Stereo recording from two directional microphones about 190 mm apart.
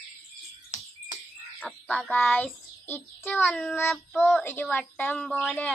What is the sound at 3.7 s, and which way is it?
A woman's voice, 15° left (ahead or behind).